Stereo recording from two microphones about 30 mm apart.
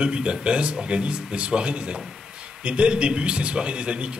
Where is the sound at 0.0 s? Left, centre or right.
Right.